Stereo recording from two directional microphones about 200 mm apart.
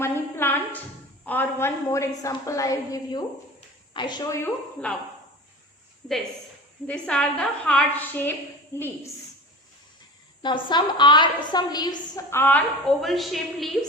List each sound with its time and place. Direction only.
0.0 s a sound: 10° left (ahead or behind)
1.2 s a woman's voice: 10° left (ahead or behind)
6.8 s a woman's voice: 5° left (ahead or behind)
10.4 s a woman's voice: 25° left (ahead or behind); by 13.7 s centre (ahead or behind)